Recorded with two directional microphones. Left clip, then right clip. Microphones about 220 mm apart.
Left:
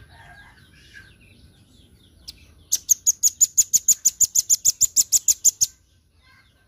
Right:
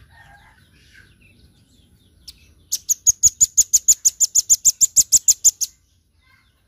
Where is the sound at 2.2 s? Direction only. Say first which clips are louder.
Even; 20° right (ahead or behind).